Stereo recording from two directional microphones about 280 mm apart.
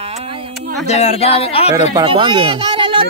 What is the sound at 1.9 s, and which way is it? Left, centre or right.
Speech, centre.